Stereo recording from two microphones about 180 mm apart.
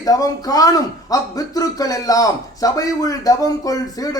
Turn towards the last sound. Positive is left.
turn(degrees=20)  # may be behind; listen again after turning